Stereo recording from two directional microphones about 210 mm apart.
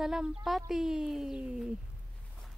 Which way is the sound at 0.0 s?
Centre (ahead or behind).